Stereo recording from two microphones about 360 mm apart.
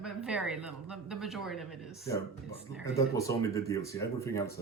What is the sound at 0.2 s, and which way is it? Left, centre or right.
Speech, centre.